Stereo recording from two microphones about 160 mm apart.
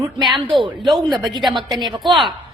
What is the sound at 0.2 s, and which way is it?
Speech, centre (ahead or behind).